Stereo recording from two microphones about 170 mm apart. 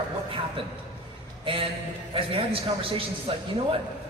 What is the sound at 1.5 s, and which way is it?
A man's voice, 30° right (ahead or behind).